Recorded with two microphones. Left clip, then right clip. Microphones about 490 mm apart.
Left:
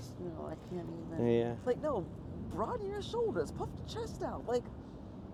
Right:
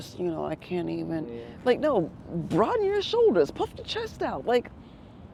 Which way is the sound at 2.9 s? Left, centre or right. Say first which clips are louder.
Right 14 dB; right.